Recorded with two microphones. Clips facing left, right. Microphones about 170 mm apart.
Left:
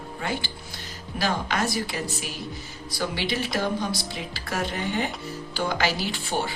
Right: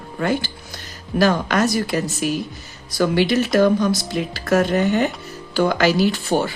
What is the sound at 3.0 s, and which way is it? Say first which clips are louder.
Speech: right 11 dB; 45° right (ahead or behind).